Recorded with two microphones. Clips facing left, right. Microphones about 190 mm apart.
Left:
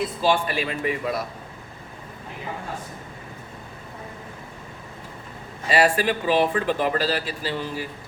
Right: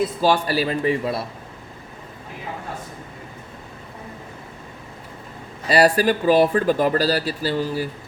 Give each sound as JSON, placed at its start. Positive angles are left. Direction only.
{"t": 0.2, "sound": "speech", "side_deg": -40}
{"t": 5.6, "sound": "speech", "side_deg": -40}